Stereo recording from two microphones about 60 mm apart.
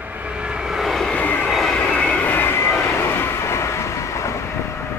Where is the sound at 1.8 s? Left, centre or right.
Centre.